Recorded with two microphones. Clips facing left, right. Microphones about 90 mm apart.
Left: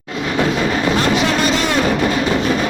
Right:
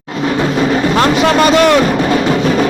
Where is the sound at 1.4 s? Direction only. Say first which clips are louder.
Right 8 dB; 70° right (ahead or behind).